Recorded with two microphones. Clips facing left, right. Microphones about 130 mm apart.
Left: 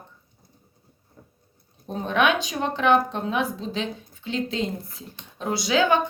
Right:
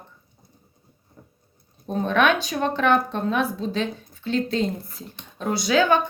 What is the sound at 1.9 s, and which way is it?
Speech, 15° left (ahead or behind).